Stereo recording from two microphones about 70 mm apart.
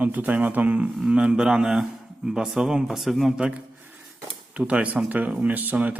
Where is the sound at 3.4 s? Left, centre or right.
Centre.